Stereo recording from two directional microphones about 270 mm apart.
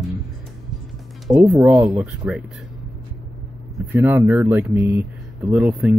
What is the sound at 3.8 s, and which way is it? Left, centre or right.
Speech, centre.